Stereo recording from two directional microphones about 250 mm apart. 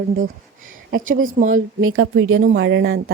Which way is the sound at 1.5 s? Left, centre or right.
Right.